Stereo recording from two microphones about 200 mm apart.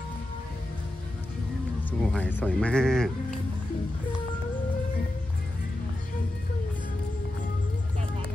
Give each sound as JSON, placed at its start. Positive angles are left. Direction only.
{"t": 1.9, "sound": "speech", "side_deg": 10}